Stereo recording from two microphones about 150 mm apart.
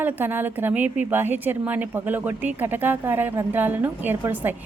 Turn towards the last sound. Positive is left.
turn(degrees=-15)  # may be behind; listen again after turning